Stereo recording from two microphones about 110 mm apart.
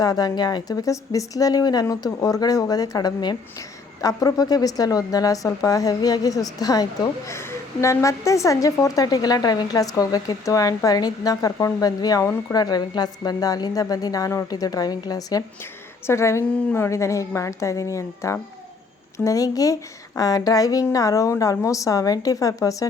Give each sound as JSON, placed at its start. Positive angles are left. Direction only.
{"t": 0.0, "sound": "a woman's voice", "side_deg": 35}
{"t": 16.0, "sound": "a woman's voice", "side_deg": 25}